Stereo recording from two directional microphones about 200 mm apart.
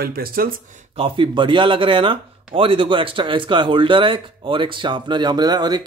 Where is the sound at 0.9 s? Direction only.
25° right (ahead or behind).